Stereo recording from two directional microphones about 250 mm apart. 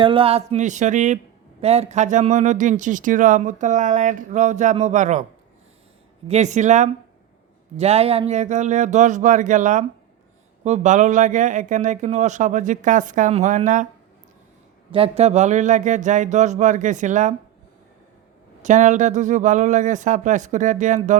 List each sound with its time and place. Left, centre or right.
0.0 s speech: right
6.2 s speech: right
14.9 s speech: right
18.6 s speech: right